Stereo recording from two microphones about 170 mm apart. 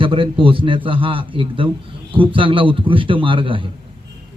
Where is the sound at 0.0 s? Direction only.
30° right (ahead or behind).